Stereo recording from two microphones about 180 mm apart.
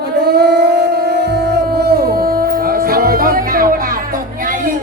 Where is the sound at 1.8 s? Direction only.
55° right (ahead or behind).